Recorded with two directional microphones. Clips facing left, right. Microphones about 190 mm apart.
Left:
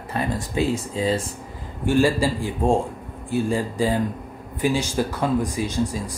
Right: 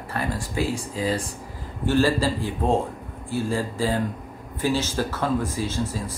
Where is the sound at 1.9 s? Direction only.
15° left (ahead or behind).